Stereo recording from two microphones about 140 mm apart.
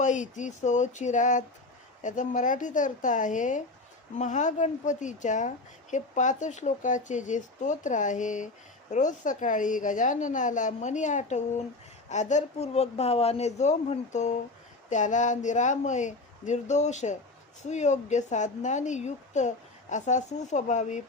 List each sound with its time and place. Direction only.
0.0 s a woman's voice: 60° left (ahead or behind)